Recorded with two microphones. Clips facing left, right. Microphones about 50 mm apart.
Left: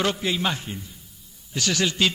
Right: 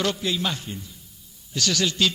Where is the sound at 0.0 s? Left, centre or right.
Left.